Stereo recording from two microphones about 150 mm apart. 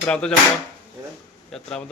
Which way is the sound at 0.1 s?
5° left (ahead or behind).